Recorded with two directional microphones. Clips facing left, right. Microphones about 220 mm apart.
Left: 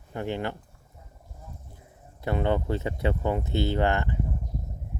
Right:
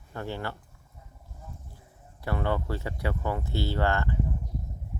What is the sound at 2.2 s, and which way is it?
Speech, 20° left (ahead or behind).